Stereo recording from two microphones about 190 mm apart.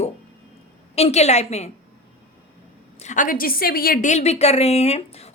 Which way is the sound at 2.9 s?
40° left (ahead or behind).